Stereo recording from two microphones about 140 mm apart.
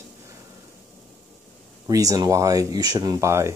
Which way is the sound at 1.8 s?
25° right (ahead or behind).